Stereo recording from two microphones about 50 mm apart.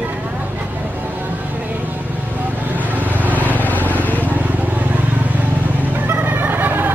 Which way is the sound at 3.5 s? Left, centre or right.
Left.